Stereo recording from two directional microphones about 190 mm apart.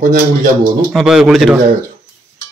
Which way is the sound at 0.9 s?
Centre (ahead or behind).